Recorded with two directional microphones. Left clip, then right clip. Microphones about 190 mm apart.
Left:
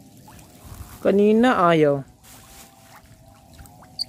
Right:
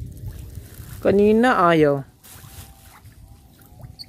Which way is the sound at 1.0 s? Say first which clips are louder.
Right 1 dB; 15° right (ahead or behind).